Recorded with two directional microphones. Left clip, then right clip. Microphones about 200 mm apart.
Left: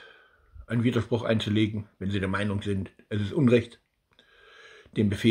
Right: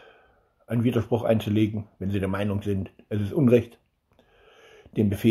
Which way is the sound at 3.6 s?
15° left (ahead or behind).